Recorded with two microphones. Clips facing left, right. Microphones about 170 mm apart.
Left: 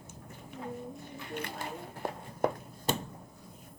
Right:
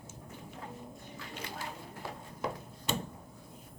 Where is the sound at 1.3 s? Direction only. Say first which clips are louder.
Left 5 dB; 55° left (ahead or behind).